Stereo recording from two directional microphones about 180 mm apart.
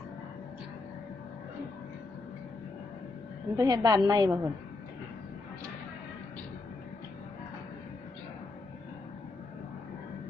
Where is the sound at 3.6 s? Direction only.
20° right (ahead or behind).